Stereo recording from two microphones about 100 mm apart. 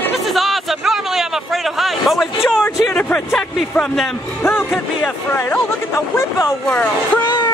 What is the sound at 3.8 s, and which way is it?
Speech, 5° left (ahead or behind).